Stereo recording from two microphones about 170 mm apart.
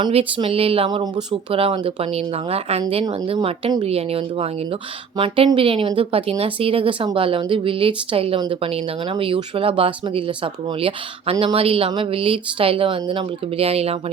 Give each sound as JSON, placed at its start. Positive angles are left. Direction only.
{"t": 0.0, "sound": "speech", "side_deg": -35}
{"t": 2.8, "sound": "speech", "side_deg": -25}